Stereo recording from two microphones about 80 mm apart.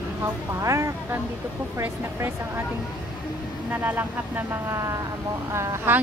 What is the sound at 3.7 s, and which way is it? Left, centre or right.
Speech, right.